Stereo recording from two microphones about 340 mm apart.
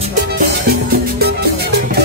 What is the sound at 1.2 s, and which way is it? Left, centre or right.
Music, right.